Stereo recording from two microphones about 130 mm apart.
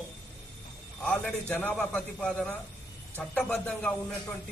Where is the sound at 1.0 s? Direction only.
5° left (ahead or behind).